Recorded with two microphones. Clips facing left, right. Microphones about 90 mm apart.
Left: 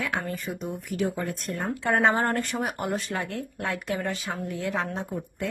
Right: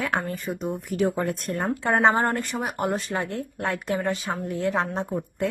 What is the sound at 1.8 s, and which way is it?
Speech, 25° right (ahead or behind).